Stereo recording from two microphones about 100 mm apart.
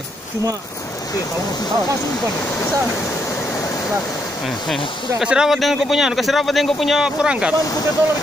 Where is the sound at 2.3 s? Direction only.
25° left (ahead or behind).